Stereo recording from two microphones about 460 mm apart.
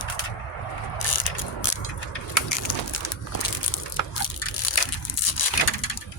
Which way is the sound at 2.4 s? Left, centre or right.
Left.